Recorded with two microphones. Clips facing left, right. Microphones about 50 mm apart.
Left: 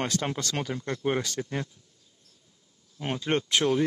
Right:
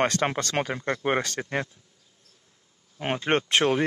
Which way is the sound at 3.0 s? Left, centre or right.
Right.